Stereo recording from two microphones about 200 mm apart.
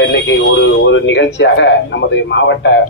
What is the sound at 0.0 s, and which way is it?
A man's voice, 65° left (ahead or behind).